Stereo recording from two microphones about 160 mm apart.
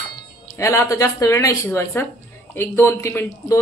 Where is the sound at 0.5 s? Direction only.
20° left (ahead or behind).